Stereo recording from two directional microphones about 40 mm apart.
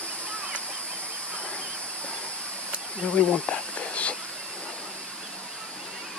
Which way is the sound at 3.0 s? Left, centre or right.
Left.